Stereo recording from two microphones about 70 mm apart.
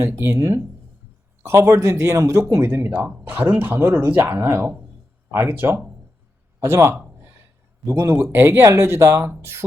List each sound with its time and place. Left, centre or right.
0.2 s speech: right
2.4 s speech: right
3.2 s speech: right